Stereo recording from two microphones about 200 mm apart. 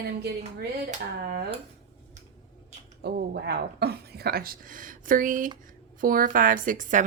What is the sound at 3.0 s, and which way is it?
Speech, 55° right (ahead or behind).